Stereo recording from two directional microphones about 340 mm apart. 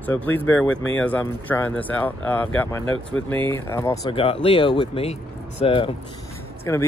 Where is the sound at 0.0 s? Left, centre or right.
Centre.